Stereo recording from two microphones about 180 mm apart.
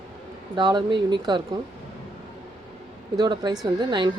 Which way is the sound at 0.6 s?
25° right (ahead or behind).